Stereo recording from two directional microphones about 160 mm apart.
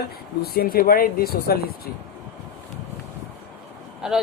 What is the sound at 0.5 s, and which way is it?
Speech, 70° left (ahead or behind).